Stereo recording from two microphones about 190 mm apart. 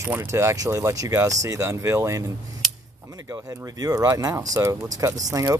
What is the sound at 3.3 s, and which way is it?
Speech, 20° right (ahead or behind).